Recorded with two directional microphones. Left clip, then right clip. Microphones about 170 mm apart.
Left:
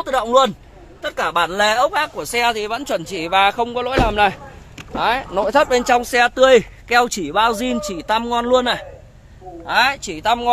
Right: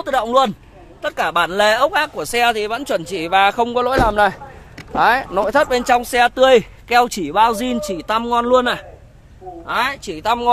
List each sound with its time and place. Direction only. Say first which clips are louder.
0.0 s speech: even; 20° right (ahead or behind); by 5.3 s 35° right (ahead or behind)
5.5 s speech: left 1 dB; centre (ahead or behind); by 8.8 s 15° right (ahead or behind)
9.7 s speech: left 3 dB; 5° right (ahead or behind)